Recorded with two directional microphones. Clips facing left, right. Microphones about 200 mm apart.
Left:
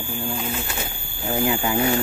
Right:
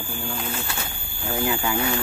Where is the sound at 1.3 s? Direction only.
25° left (ahead or behind).